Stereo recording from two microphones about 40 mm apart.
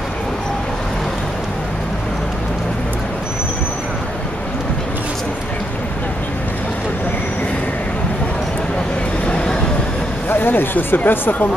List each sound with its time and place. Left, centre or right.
10.3 s speech: left